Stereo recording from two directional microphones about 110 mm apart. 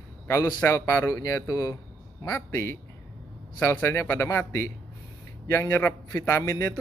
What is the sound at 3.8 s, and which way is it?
A man's voice, 25° left (ahead or behind).